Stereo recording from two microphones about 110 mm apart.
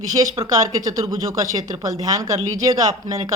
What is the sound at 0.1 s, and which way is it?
Speech, 35° right (ahead or behind).